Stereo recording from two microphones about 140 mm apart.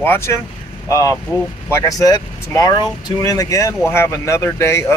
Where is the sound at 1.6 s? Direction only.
20° left (ahead or behind).